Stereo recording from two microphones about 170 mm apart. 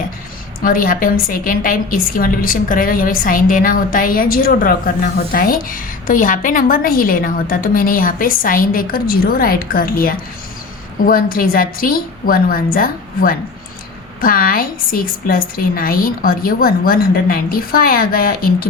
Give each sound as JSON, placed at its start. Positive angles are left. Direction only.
{"t": 0.6, "sound": "a woman's voice", "side_deg": 55}